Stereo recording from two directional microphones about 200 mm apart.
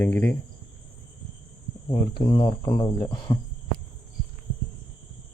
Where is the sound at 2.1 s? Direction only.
20° left (ahead or behind).